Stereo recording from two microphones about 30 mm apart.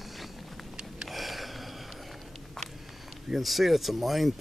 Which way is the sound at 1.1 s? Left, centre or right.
Centre.